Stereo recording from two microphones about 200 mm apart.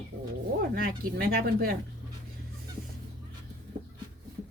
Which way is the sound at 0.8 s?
45° right (ahead or behind).